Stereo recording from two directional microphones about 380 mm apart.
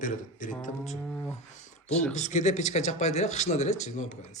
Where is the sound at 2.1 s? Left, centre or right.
Centre.